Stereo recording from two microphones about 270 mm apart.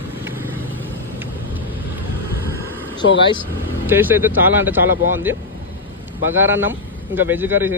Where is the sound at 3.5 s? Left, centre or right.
Centre.